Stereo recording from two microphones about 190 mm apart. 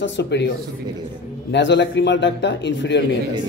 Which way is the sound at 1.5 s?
70° left (ahead or behind).